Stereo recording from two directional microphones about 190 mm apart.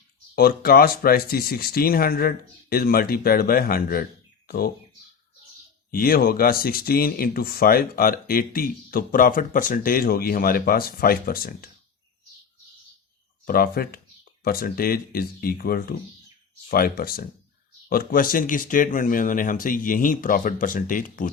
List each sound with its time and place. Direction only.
0.3 s speech: 50° left (ahead or behind)
5.9 s speech: 50° left (ahead or behind)
13.4 s speech: 50° left (ahead or behind)